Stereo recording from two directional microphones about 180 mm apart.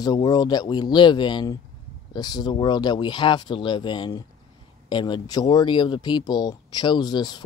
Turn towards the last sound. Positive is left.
turn(degrees=25)  # may be behind; listen again after turning